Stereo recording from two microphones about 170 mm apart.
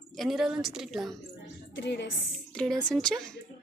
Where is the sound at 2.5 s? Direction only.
5° left (ahead or behind).